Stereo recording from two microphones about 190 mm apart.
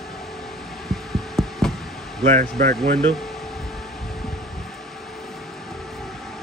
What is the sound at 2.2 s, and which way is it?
Speech, 40° right (ahead or behind).